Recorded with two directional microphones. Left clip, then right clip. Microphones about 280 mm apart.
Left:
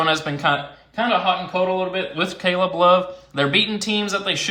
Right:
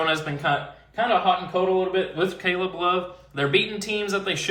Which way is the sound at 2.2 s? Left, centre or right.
Centre.